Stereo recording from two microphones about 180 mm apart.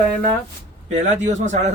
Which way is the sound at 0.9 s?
40° right (ahead or behind).